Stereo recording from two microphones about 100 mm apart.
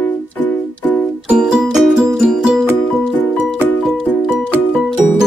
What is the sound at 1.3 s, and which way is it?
Music, 10° right (ahead or behind).